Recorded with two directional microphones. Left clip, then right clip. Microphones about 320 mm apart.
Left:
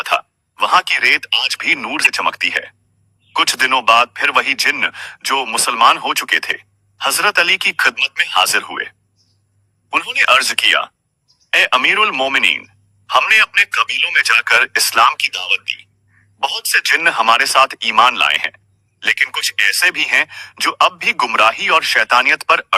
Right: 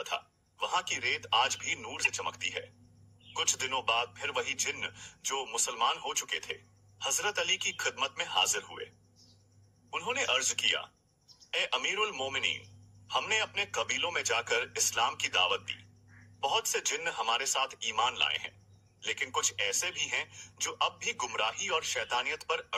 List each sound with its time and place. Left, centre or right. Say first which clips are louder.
0.0 s a sound: left 19 dB; left
1.3 s speech: left 11 dB; centre
1.6 s speech: left 18 dB; left
10.2 s a man's voice: left 19 dB; left